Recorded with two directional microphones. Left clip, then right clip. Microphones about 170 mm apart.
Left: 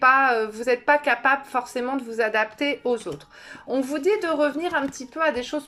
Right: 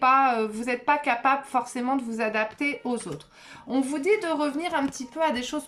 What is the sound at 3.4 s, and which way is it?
A woman's voice, 30° right (ahead or behind).